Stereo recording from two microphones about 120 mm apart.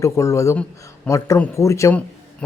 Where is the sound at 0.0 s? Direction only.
25° left (ahead or behind).